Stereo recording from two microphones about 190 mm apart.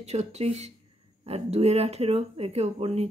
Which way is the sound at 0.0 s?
35° right (ahead or behind).